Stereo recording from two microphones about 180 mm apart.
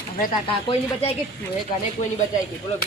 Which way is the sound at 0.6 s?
35° left (ahead or behind).